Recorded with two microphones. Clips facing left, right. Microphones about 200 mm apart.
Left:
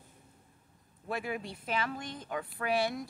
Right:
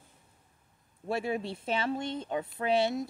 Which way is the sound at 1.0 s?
25° right (ahead or behind).